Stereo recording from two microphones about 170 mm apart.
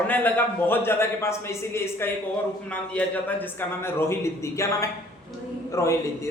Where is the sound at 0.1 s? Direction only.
10° left (ahead or behind).